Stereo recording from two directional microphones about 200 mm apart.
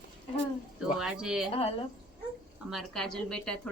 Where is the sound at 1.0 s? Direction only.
5° right (ahead or behind).